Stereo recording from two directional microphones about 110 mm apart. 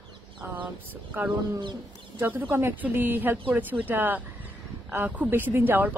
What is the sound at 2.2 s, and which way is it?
A man's voice, 20° right (ahead or behind).